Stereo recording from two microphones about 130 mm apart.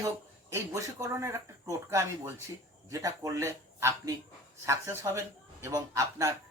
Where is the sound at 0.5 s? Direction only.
25° right (ahead or behind).